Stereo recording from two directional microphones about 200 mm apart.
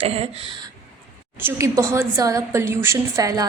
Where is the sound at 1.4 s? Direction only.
15° right (ahead or behind).